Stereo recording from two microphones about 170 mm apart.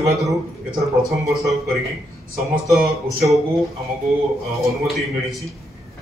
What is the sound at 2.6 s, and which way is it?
Speech, centre (ahead or behind).